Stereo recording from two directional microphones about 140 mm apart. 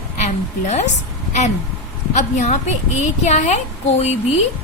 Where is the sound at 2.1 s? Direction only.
55° left (ahead or behind).